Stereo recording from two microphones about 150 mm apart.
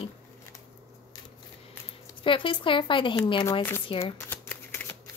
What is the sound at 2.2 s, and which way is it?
Speech, 35° left (ahead or behind).